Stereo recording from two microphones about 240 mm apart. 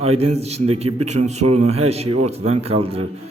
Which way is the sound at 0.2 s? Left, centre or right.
Right.